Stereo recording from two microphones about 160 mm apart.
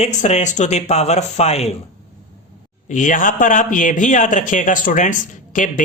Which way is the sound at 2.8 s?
55° left (ahead or behind).